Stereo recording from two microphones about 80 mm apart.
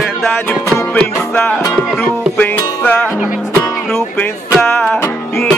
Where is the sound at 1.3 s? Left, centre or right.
Centre.